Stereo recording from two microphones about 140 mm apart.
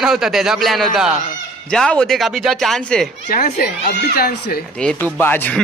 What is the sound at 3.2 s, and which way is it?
Speech, 65° left (ahead or behind).